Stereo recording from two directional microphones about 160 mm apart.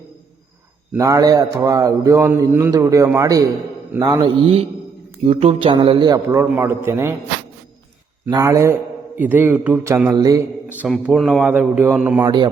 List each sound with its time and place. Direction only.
0.9 s a man's voice: 20° right (ahead or behind)
5.2 s a man's voice: 40° right (ahead or behind)
6.1 s a man's voice: 15° right (ahead or behind)
8.3 s a man's voice: 20° right (ahead or behind)
10.7 s a man's voice: 10° right (ahead or behind)
12.2 s a man's voice: 25° right (ahead or behind)